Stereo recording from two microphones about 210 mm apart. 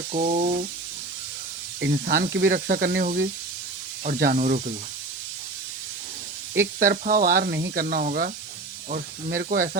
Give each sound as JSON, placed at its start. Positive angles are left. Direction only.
{"t": 0.1, "sound": "speech", "side_deg": -35}
{"t": 1.9, "sound": "speech", "side_deg": -45}
{"t": 6.7, "sound": "speech", "side_deg": -40}